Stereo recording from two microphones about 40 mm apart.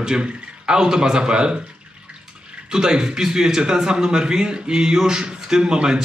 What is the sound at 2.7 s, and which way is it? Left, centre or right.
Speech, centre.